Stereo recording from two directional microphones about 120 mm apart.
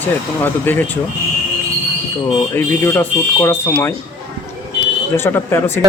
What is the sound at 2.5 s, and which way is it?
Speech, 20° left (ahead or behind).